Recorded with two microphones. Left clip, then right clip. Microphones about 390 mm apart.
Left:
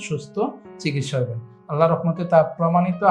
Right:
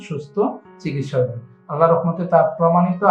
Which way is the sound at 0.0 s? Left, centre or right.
Left.